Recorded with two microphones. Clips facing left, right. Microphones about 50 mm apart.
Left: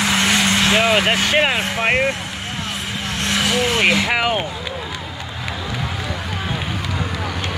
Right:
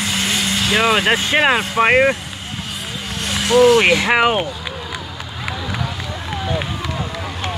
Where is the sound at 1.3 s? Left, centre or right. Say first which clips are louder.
Right 3 dB; centre.